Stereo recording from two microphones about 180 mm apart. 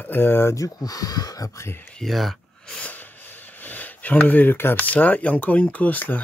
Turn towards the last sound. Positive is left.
turn(degrees=10)  # may be behind; listen again after turning